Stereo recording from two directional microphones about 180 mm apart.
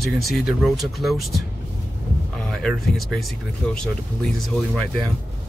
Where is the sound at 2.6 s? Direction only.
Centre (ahead or behind).